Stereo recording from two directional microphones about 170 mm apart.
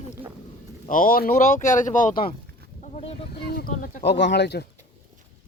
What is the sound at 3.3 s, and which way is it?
Boat, 70° left (ahead or behind).